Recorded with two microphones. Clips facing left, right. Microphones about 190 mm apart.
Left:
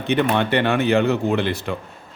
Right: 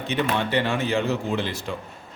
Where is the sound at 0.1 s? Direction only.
60° left (ahead or behind).